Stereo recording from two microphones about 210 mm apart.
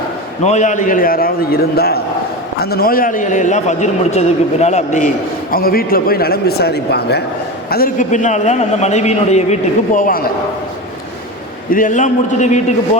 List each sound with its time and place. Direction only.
0.4 s a man's voice: 35° left (ahead or behind)
11.7 s a man's voice: 40° left (ahead or behind)